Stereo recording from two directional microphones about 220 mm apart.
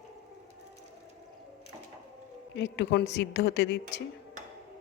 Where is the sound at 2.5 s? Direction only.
50° left (ahead or behind).